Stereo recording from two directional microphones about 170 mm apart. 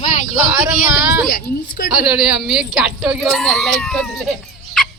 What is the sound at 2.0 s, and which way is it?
Speech, 5° right (ahead or behind).